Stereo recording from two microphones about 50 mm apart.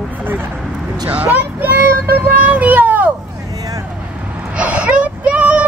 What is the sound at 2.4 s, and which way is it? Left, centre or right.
Speech, right.